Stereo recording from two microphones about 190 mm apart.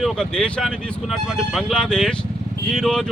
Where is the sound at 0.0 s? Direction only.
5° left (ahead or behind).